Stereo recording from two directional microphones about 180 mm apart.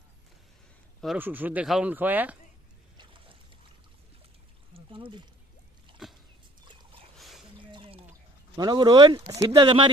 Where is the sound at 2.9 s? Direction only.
30° right (ahead or behind).